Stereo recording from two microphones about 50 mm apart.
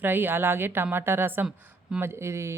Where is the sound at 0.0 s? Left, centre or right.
Right.